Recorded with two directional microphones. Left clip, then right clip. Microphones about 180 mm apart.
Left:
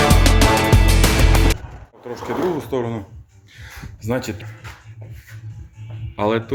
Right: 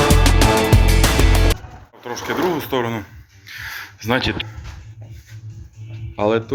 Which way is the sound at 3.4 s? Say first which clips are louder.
Right 10 dB; centre (ahead or behind).